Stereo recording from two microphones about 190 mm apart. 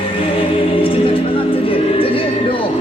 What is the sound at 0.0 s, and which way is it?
Music, 30° left (ahead or behind).